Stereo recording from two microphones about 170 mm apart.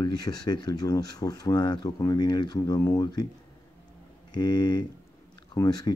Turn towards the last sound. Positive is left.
turn(degrees=20)  # may be behind; listen again after turning